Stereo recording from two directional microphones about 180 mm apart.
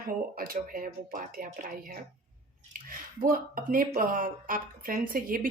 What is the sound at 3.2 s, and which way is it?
Speech, 50° right (ahead or behind).